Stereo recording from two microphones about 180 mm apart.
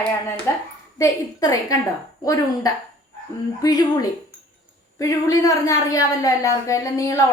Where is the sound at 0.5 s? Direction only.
15° left (ahead or behind).